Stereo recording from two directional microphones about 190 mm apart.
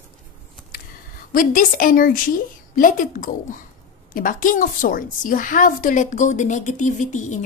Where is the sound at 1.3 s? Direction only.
45° left (ahead or behind).